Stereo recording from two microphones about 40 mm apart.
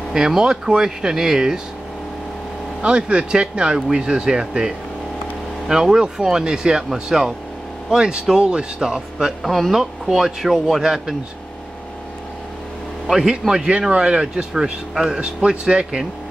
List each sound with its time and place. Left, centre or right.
0.1 s speech: centre
2.8 s speech: right
9.4 s speech: centre
13.0 s speech: centre